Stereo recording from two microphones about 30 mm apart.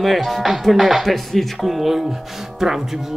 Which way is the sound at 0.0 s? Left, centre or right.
Centre.